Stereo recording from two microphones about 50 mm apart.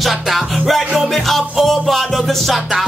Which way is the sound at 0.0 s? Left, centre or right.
Centre.